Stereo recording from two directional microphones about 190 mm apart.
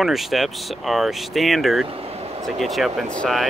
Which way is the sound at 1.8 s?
30° right (ahead or behind).